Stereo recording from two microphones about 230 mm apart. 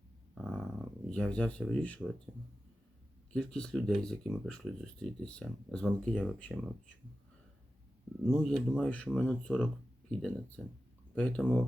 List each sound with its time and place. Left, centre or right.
0.4 s a sound: centre
3.3 s speech: centre
8.3 s speech: centre